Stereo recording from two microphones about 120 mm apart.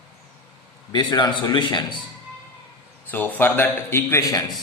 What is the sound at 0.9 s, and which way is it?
A man's voice, 35° left (ahead or behind).